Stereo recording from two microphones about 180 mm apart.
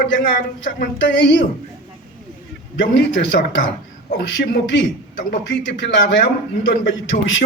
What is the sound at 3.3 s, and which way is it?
A man's voice, 70° left (ahead or behind).